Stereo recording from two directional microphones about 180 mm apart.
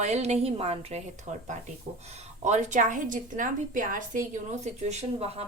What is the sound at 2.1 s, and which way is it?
A woman's voice, 40° right (ahead or behind).